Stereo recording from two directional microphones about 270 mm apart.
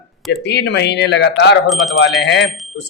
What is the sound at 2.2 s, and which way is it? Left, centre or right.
Speech, left.